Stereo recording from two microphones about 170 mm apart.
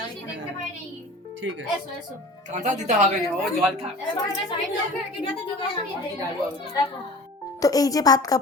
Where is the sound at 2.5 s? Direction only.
45° right (ahead or behind).